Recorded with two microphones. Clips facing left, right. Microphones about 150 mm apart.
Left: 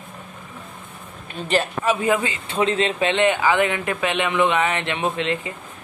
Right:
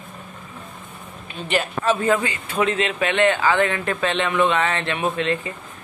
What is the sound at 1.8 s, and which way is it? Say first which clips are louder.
A man's voice: right 1 dB; 15° left (ahead or behind).